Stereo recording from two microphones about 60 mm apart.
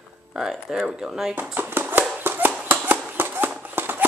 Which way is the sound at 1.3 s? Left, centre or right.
Right.